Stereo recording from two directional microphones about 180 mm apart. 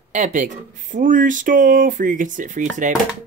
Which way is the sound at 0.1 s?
40° right (ahead or behind).